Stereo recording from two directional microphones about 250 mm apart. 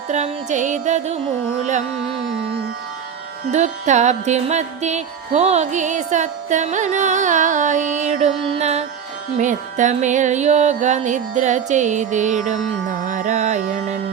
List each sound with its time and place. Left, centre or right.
0.1 s music: right
3.5 s music: right